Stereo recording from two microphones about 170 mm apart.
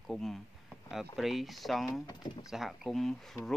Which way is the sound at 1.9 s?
20° left (ahead or behind).